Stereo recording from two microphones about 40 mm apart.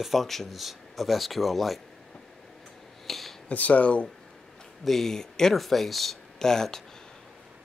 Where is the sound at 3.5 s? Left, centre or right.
Left.